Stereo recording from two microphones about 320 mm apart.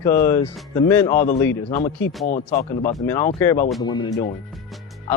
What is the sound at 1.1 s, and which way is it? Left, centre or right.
Speech, left.